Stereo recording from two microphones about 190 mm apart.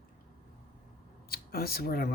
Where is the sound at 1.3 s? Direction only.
50° left (ahead or behind).